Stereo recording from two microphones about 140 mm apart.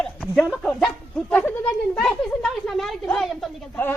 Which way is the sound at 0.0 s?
5° left (ahead or behind).